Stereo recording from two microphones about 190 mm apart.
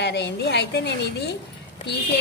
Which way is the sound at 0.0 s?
65° left (ahead or behind).